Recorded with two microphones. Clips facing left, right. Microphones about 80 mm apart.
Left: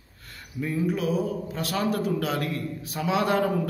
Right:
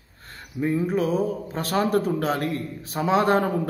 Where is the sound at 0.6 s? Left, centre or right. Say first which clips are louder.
Right 3 dB; right.